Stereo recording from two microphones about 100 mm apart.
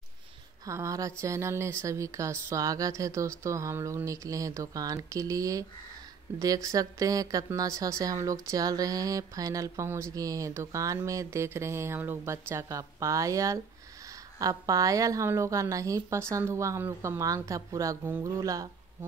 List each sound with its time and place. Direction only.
0.7 s speech: 30° right (ahead or behind)
17.2 s speech: 35° right (ahead or behind)